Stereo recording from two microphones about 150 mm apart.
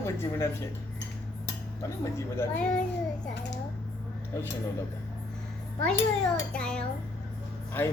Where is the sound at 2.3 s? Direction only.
5° left (ahead or behind).